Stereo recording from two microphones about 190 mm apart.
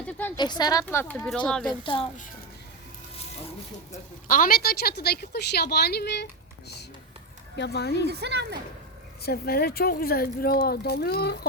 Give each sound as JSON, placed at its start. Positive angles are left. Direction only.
{"t": 0.0, "sound": "a sound", "side_deg": 10}
{"t": 0.3, "sound": "speech", "side_deg": 20}
{"t": 1.8, "sound": "speech", "side_deg": 25}
{"t": 3.9, "sound": "a woman's voice", "side_deg": 45}
{"t": 7.5, "sound": "a woman's voice", "side_deg": 60}
{"t": 8.1, "sound": "speech", "side_deg": -60}
{"t": 9.2, "sound": "a woman's voice", "side_deg": 55}